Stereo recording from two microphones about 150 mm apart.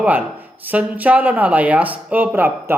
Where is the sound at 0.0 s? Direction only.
10° right (ahead or behind).